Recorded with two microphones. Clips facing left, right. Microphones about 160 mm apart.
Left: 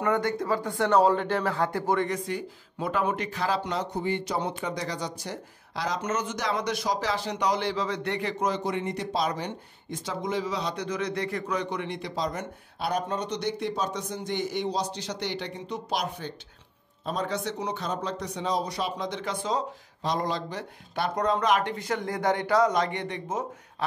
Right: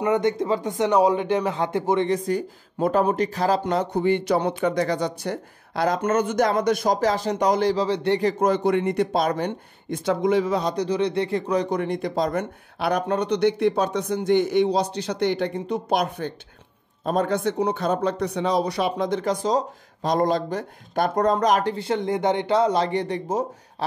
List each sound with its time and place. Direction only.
0.0 s a man's voice: 20° right (ahead or behind)
2.1 s speech: 40° right (ahead or behind)